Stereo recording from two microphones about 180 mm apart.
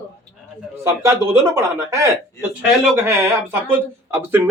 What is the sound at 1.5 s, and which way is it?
Speech, 15° right (ahead or behind).